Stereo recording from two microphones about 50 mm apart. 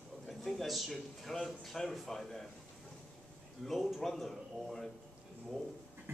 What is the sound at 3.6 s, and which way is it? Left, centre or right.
A man's voice, centre.